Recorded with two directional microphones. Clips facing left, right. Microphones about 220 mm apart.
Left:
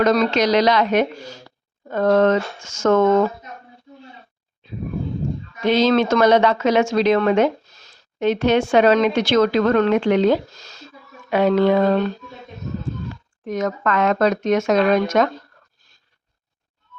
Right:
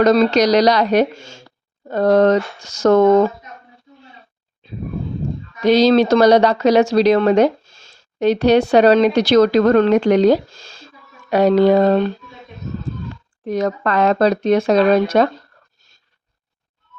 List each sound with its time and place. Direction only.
0.0 s speech: 35° right (ahead or behind)
5.6 s speech: 35° right (ahead or behind)
13.4 s speech: 35° right (ahead or behind)